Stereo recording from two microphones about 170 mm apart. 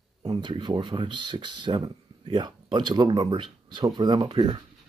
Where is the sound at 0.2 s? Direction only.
25° right (ahead or behind).